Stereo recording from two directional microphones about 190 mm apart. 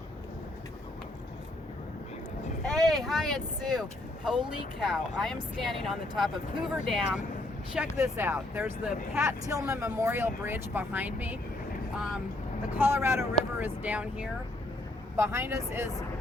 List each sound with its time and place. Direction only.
2.6 s speech: centre (ahead or behind)
12.7 s speech: 10° right (ahead or behind)